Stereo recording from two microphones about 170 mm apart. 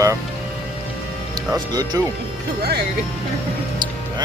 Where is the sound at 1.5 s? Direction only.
20° right (ahead or behind).